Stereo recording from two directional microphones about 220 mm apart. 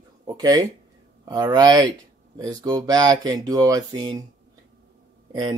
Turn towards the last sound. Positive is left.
turn(degrees=-20)  # may be behind; listen again after turning